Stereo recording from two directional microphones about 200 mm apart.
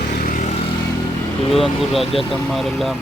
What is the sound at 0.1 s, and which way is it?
Vehicle, 40° left (ahead or behind).